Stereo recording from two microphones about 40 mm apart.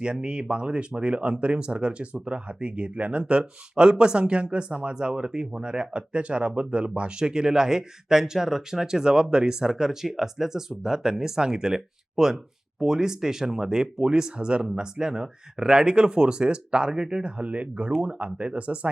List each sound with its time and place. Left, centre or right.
0.0 s speech: right
7.2 s speech: centre
17.3 s speech: right